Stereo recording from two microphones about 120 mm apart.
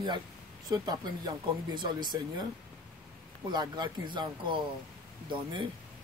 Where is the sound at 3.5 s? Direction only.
35° right (ahead or behind).